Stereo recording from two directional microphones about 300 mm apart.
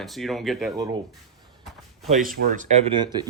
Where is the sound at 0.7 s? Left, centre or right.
Centre.